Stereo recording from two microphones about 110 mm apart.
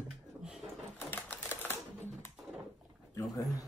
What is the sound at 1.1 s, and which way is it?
Typewriter, 15° left (ahead or behind).